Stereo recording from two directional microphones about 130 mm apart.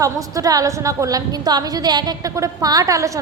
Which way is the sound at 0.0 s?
25° right (ahead or behind).